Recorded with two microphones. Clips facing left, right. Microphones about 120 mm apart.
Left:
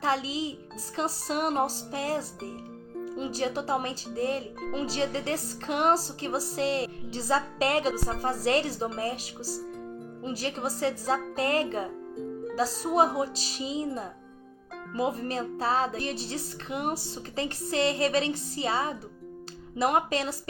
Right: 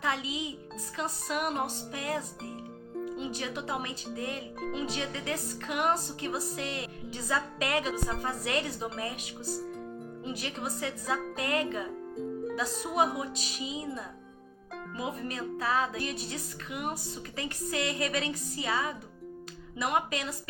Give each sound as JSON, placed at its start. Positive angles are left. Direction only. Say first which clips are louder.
{"t": 0.0, "sound": "speech", "louder": "left 4 dB", "side_deg": 30}
{"t": 17.7, "sound": "music", "louder": "left 6 dB", "side_deg": 30}
{"t": 19.7, "sound": "speech", "louder": "left 5 dB", "side_deg": 35}